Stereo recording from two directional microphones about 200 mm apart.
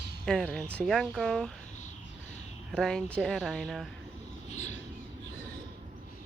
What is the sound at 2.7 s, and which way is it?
Speech, 5° left (ahead or behind).